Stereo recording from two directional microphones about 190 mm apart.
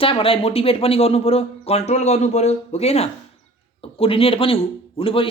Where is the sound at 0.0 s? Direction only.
30° left (ahead or behind).